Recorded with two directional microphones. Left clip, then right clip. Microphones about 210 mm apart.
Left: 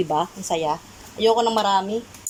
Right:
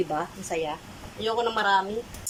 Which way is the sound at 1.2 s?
25° left (ahead or behind).